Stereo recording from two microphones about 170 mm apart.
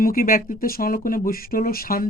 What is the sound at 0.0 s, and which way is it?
Speech, 60° left (ahead or behind).